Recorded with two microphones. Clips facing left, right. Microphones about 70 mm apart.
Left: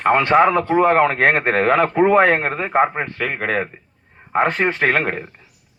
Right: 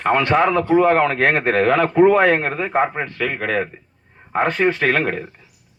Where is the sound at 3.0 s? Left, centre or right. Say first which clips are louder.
Even; left.